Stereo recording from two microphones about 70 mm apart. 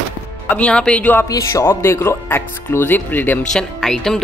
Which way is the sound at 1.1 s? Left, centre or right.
Left.